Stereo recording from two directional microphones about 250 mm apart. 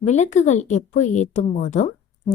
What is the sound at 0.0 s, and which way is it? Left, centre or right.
Speech, left.